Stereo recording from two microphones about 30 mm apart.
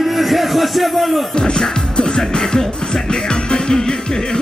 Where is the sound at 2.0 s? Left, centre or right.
Left.